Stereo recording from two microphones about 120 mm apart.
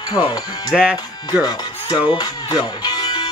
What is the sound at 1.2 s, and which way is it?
Chopping, 35° left (ahead or behind).